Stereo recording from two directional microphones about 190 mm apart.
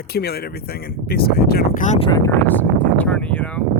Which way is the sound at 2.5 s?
10° left (ahead or behind).